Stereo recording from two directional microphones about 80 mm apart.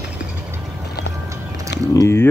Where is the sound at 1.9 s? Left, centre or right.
Left.